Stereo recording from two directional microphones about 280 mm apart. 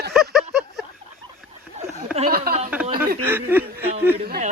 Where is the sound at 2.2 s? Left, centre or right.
Right.